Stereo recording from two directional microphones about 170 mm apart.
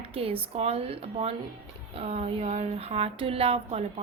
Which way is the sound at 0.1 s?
35° right (ahead or behind).